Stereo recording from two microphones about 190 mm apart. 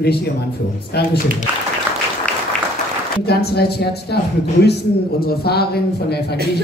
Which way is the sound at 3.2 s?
55° left (ahead or behind).